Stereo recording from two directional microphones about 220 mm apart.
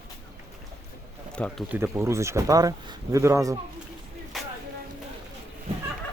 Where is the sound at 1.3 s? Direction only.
5° left (ahead or behind).